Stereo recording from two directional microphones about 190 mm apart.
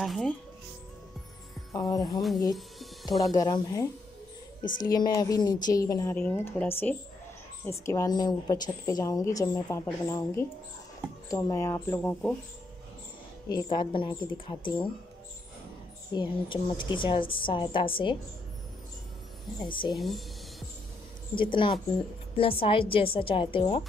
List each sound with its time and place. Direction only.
0.0 s music: centre (ahead or behind)
1.7 s a woman's voice: 20° left (ahead or behind)
2.5 s music: centre (ahead or behind)
3.1 s a woman's voice: 20° left (ahead or behind)
7.8 s a woman's voice: 15° left (ahead or behind)
13.5 s a woman's voice: 25° left (ahead or behind)
16.1 s a woman's voice: 25° left (ahead or behind)
19.6 s a woman's voice: 25° left (ahead or behind)
21.4 s a woman's voice: 25° left (ahead or behind)